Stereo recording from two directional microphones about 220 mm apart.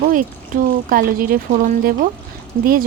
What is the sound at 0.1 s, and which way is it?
Speech, 40° right (ahead or behind).